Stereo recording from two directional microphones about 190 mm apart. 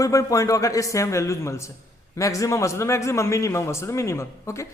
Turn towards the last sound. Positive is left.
turn(degrees=15)  # may be behind; listen again after turning